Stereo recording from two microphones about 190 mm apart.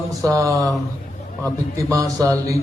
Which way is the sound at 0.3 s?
15° right (ahead or behind).